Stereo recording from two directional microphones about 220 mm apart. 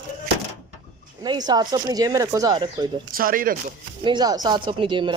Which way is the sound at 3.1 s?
40° right (ahead or behind).